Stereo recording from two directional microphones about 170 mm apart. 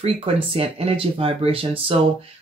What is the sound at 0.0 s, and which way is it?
Speech, 35° right (ahead or behind).